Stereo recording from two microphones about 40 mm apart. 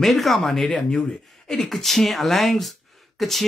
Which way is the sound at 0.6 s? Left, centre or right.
Centre.